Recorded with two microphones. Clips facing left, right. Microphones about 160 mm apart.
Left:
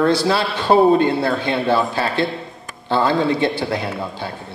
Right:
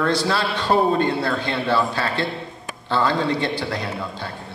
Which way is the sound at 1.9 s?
20° left (ahead or behind).